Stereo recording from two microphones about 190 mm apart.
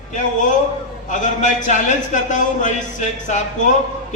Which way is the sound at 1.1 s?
40° left (ahead or behind).